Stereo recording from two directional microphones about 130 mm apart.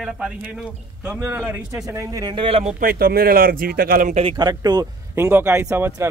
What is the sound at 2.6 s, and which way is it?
Speech, 90° right.